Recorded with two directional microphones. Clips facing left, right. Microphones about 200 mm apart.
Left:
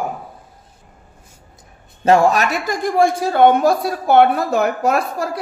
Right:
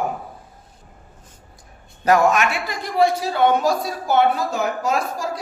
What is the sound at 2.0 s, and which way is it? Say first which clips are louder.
Speech: left 3 dB; 30° left (ahead or behind).